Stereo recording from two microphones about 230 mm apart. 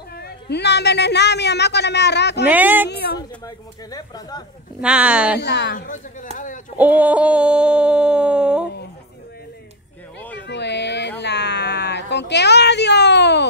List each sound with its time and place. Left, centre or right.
0.1 s a woman's voice: left
2.4 s speech: centre
2.9 s a woman's voice: left
3.2 s speech: centre
4.8 s a sound: centre
5.4 s a woman's voice: left
6.3 s speech: left
6.8 s a sound: centre
10.4 s a sound: left